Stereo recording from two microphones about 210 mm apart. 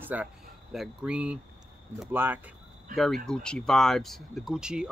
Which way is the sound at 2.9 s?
40° right (ahead or behind).